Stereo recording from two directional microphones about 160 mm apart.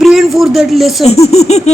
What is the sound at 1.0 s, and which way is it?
Speech, 40° left (ahead or behind).